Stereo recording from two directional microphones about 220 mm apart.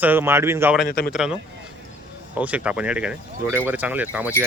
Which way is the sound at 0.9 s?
45° left (ahead or behind).